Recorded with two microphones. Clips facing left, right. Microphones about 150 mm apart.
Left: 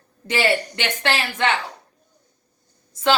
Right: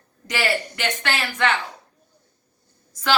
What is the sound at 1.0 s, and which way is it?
Speech, 25° left (ahead or behind).